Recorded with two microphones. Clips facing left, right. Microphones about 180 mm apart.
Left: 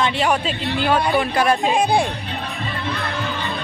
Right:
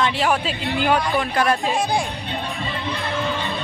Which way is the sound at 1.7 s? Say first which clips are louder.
Left 4 dB; 60° left (ahead or behind).